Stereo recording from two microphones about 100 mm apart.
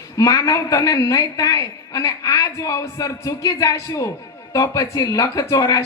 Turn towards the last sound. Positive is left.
turn(degrees=35)  # may be behind; listen again after turning